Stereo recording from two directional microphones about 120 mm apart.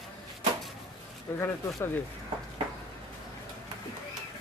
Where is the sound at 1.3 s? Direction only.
20° left (ahead or behind).